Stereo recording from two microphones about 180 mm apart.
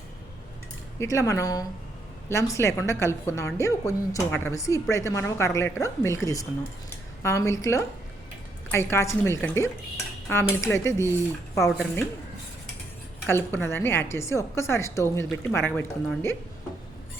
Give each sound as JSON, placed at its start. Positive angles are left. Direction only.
{"t": 0.9, "sound": "a woman's voice", "side_deg": 15}
{"t": 13.2, "sound": "a woman's voice", "side_deg": 15}